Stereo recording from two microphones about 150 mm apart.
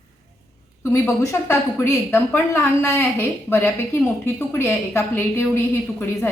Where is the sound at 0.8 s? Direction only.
15° left (ahead or behind).